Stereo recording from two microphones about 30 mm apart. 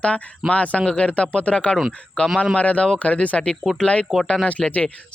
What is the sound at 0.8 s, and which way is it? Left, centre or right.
Speech, left.